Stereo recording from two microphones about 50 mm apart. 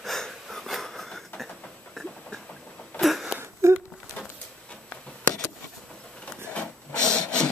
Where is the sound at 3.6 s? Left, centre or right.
Right.